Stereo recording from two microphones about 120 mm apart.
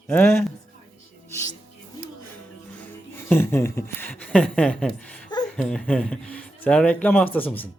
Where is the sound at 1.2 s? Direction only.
20° left (ahead or behind).